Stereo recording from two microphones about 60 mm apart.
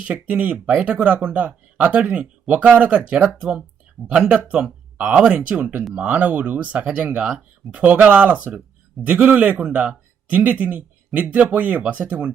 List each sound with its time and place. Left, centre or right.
0.0 s a man's voice: right